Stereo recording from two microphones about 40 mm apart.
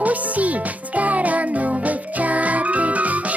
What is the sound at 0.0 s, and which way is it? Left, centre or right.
Music, right.